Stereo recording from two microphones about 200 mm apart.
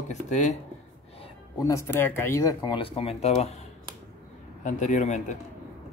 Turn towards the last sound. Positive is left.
turn(degrees=35)  # may be behind; listen again after turning